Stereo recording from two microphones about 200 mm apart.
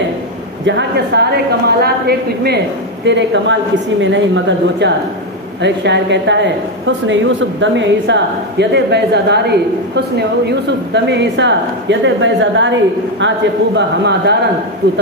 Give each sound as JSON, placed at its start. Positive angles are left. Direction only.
{"t": 0.7, "sound": "a woman's voice", "side_deg": -60}
{"t": 3.1, "sound": "a woman's voice", "side_deg": -65}
{"t": 13.7, "sound": "a woman's voice", "side_deg": -60}